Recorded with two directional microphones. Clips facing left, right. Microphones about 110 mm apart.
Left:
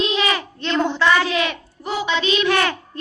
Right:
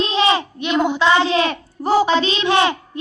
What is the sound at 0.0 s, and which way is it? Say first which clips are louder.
Child singing: right 4 dB; 30° right (ahead or behind).